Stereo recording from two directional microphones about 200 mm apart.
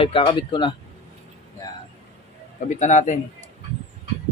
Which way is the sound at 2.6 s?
35° left (ahead or behind).